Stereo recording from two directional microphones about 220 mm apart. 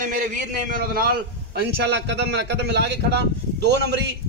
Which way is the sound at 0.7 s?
40° right (ahead or behind).